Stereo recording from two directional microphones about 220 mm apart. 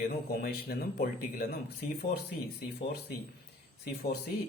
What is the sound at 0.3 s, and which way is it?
A man's voice, 40° left (ahead or behind).